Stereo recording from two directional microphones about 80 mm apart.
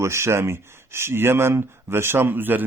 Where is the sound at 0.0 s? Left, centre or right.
Right.